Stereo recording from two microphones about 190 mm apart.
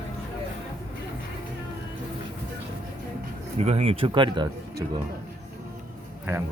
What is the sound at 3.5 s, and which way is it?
Speech, 35° right (ahead or behind).